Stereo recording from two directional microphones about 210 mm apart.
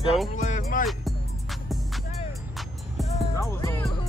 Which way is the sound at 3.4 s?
15° left (ahead or behind).